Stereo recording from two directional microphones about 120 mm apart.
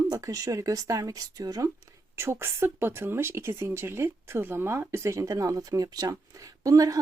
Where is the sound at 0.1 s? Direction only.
30° right (ahead or behind).